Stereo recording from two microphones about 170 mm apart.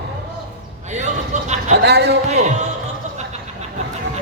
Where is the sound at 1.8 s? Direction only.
75° right (ahead or behind).